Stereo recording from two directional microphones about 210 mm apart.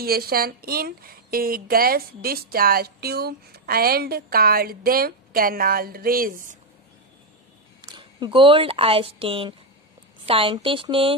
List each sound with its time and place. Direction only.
0.0 s a woman's voice: 45° right (ahead or behind)
7.8 s speech: 20° right (ahead or behind)